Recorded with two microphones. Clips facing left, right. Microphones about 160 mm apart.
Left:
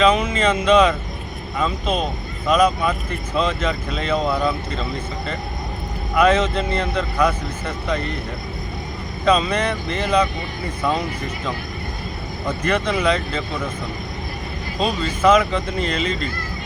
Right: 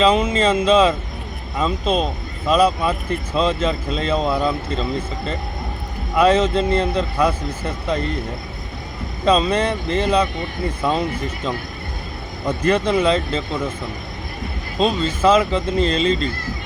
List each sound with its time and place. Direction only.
0.0 s speech: 30° right (ahead or behind)
9.2 s speech: 30° right (ahead or behind)
12.5 s speech: 30° right (ahead or behind)
14.8 s speech: 30° right (ahead or behind)